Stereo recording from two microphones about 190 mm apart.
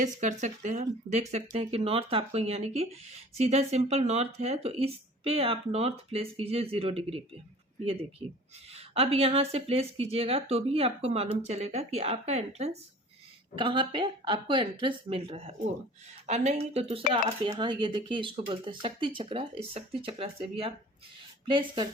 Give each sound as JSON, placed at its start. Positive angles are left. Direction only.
{"t": 0.0, "sound": "speech", "side_deg": -40}
{"t": 8.7, "sound": "speech", "side_deg": -30}